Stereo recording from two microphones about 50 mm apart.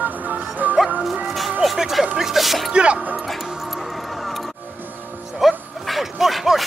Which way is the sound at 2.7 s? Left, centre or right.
Right.